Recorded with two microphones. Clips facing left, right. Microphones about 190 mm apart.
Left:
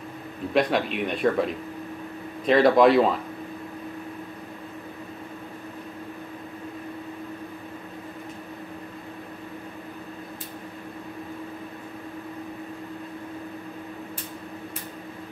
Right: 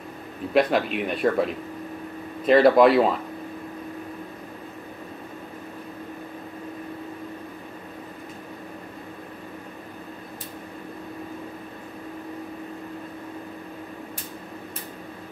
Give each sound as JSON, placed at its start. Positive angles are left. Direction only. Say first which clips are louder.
{"t": 0.5, "sound": "speech", "louder": "right 2 dB", "side_deg": 0}
{"t": 2.4, "sound": "speech", "louder": "right 2 dB", "side_deg": 0}